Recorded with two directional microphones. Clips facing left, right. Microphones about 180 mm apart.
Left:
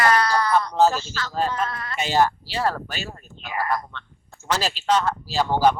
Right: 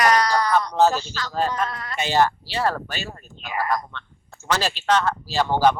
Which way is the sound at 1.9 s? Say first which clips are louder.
Even; 5° left (ahead or behind).